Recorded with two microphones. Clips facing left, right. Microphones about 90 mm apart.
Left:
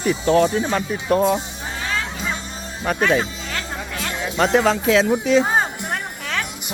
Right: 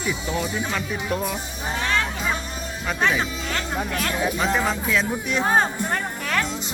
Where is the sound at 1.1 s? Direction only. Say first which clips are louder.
Left 10 dB; 45° left (ahead or behind).